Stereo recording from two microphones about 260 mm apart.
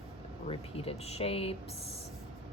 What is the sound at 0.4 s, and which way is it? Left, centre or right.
Speech, left.